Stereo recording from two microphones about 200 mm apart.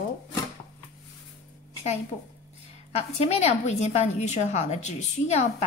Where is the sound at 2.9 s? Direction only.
35° left (ahead or behind).